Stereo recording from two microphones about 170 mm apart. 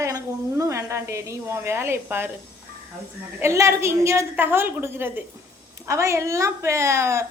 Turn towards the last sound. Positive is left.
turn(degrees=-15)  # may be behind; listen again after turning